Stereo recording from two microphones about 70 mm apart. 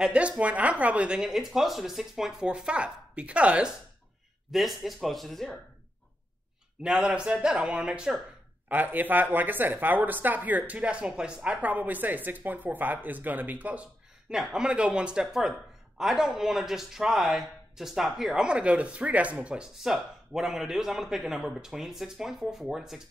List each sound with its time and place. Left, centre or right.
0.0 s a man's voice: centre
4.5 s speech: centre
6.8 s a man's voice: centre
8.6 s speech: right
14.5 s a man's voice: centre